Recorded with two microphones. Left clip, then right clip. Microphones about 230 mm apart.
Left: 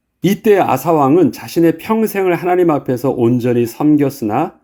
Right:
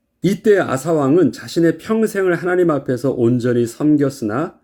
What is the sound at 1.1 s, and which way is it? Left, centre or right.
Speech, left.